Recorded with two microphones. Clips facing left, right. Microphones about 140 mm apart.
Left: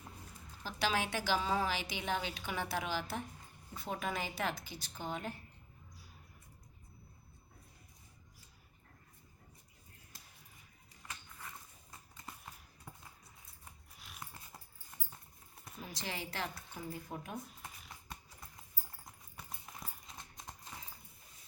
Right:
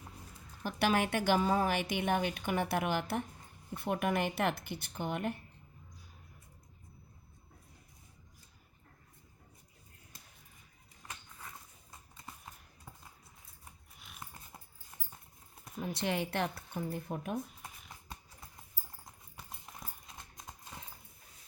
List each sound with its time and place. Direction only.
0.6 s a woman's voice: 55° right (ahead or behind)
11.3 s a sound: 10° right (ahead or behind)
13.9 s dog: centre (ahead or behind)
15.8 s a woman's voice: 60° right (ahead or behind)
17.5 s a sound: centre (ahead or behind)
18.1 s clip-clop: 5° right (ahead or behind)